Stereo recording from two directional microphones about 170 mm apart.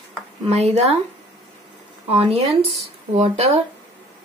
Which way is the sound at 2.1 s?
35° right (ahead or behind).